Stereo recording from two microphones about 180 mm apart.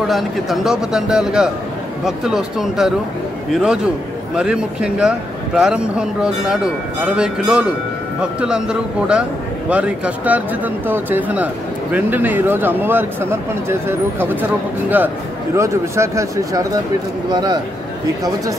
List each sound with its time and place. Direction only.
0.0 s speech: centre (ahead or behind); by 17.6 s 20° right (ahead or behind)